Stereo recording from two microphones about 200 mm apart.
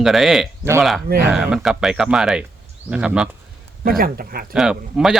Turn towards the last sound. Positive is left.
turn(degrees=0)  # may be behind; listen again after turning